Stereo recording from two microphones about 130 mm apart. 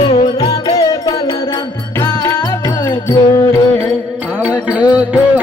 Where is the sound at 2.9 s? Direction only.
35° left (ahead or behind).